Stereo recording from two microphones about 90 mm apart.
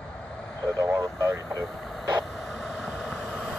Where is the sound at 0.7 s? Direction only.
35° right (ahead or behind).